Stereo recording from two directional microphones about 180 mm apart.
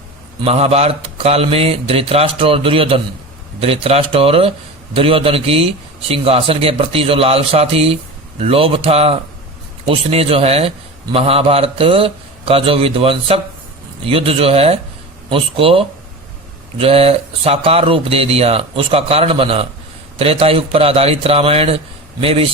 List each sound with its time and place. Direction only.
0.4 s speech: 35° right (ahead or behind)